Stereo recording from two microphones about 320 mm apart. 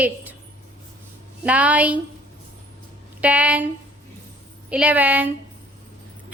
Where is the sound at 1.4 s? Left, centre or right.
Centre.